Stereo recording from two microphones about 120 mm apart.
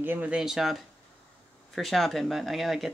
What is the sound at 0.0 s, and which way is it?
Speech, 15° right (ahead or behind).